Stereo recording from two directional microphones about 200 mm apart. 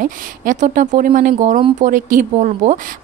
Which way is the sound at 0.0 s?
40° right (ahead or behind).